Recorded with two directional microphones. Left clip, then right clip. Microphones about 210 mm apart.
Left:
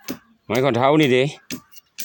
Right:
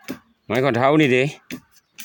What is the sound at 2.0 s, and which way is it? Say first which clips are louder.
Scissors: left 5 dB; 20° left (ahead or behind).